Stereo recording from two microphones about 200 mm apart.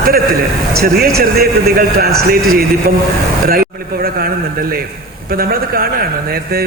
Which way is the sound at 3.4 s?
50° right (ahead or behind).